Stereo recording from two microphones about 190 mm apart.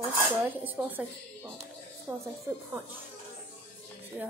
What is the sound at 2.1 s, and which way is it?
Speech, 10° right (ahead or behind).